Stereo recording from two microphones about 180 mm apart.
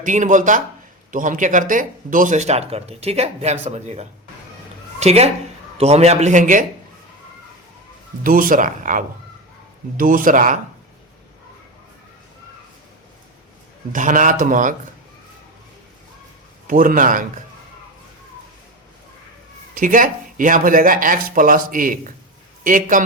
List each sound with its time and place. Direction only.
0.0 s a woman's voice: 45° right (ahead or behind)
8.2 s speech: 50° right (ahead or behind)
13.9 s speech: 45° right (ahead or behind)
16.6 s speech: 50° right (ahead or behind)
19.7 s speech: 50° right (ahead or behind)